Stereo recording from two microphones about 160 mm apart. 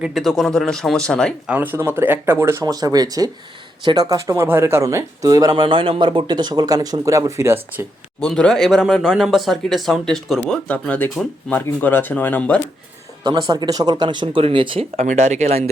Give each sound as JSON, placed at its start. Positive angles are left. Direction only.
{"t": 0.0, "sound": "speech", "side_deg": 0}
{"t": 1.5, "sound": "speech", "side_deg": -10}
{"t": 8.2, "sound": "speech", "side_deg": 5}
{"t": 13.2, "sound": "speech", "side_deg": -25}